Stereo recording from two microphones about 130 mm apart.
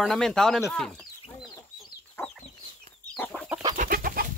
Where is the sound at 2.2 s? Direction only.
20° left (ahead or behind).